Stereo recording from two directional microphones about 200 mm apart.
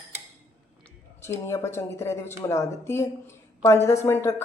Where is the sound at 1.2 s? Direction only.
15° left (ahead or behind).